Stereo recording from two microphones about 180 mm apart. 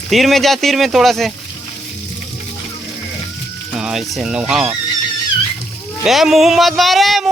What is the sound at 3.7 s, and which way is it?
Speech, 5° right (ahead or behind).